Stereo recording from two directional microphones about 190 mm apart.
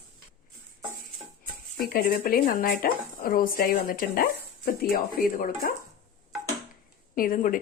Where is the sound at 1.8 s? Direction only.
50° left (ahead or behind).